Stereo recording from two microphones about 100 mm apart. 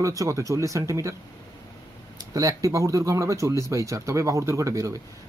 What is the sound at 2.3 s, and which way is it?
Speech, 35° right (ahead or behind).